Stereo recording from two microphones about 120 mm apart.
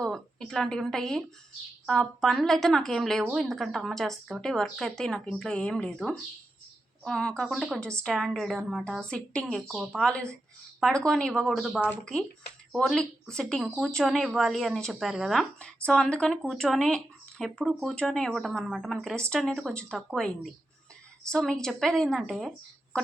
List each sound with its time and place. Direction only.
0.0 s a woman's voice: 5° left (ahead or behind)
7.0 s speech: 5° left (ahead or behind)
9.6 s speech: 5° right (ahead or behind)
10.0 s speech: 10° left (ahead or behind)